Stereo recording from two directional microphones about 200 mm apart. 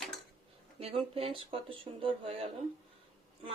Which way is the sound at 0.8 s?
30° right (ahead or behind).